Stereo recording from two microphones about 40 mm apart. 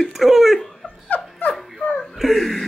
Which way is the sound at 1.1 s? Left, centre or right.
Left.